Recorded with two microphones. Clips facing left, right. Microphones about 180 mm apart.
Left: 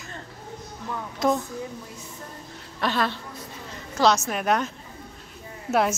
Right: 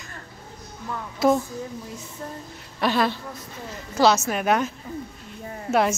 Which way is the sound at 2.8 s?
10° right (ahead or behind).